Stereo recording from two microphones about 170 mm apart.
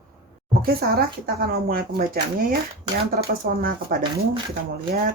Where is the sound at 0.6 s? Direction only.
60° right (ahead or behind).